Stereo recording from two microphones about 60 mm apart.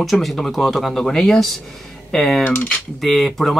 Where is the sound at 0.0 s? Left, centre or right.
Centre.